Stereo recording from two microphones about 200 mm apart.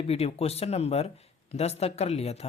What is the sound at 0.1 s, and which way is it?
Speech, 30° left (ahead or behind).